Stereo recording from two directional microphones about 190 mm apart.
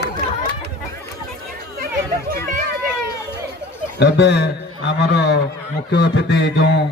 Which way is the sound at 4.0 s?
65° left (ahead or behind).